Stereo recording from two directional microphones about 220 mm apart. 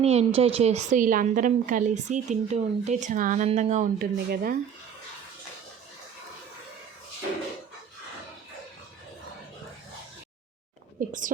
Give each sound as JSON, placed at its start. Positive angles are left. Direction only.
{"t": 0.0, "sound": "a woman's voice", "side_deg": -30}
{"t": 11.0, "sound": "a woman's voice", "side_deg": -40}